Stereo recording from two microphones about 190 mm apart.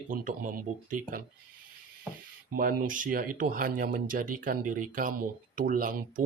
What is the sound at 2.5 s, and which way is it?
Speech, 45° right (ahead or behind).